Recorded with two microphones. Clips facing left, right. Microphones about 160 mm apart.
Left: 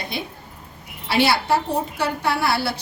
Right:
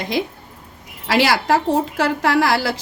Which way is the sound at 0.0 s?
90° right.